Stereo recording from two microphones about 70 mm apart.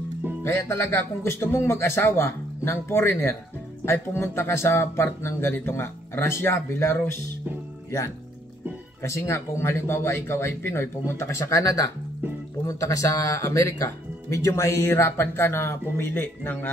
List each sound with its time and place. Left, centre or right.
0.4 s speech: left
9.0 s speech: left
14.9 s speech: left